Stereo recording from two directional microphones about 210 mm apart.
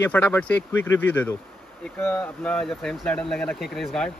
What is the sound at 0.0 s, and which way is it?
Speech, 10° left (ahead or behind).